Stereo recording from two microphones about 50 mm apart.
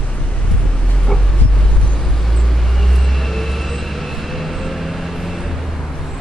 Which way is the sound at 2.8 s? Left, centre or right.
Centre.